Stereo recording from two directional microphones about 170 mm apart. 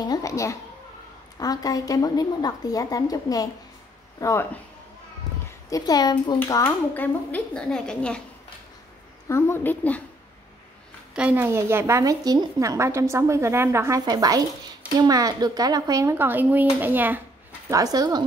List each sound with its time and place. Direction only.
0.0 s a sound: 20° left (ahead or behind)
1.4 s a woman's voice: 20° left (ahead or behind)
5.7 s a woman's voice: 20° left (ahead or behind); by 8.2 s 5° left (ahead or behind)
9.3 s speech: 15° left (ahead or behind)
11.1 s a woman's voice: 10° right (ahead or behind)